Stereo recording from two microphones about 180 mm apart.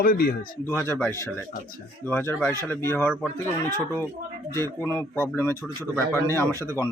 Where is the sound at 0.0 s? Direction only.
55° left (ahead or behind).